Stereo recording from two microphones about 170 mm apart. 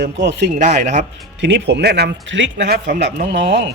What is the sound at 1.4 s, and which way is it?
Speech, 90° right.